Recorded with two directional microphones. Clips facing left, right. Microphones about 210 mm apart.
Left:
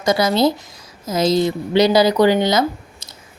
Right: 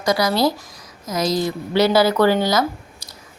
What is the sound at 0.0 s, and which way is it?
A woman's voice, 25° left (ahead or behind).